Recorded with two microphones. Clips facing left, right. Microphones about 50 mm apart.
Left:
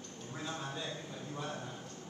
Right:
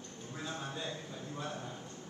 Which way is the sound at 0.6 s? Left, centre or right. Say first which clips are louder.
Even; right.